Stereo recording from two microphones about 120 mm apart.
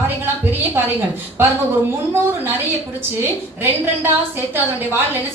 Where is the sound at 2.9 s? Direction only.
20° right (ahead or behind).